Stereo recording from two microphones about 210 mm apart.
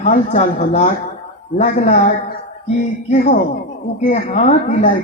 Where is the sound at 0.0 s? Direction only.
35° left (ahead or behind).